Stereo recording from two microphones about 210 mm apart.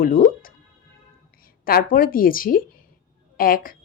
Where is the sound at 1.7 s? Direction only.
45° left (ahead or behind).